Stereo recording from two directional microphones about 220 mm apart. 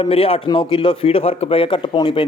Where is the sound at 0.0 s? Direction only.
25° left (ahead or behind).